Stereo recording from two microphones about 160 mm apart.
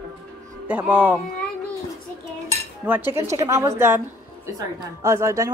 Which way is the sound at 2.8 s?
15° right (ahead or behind).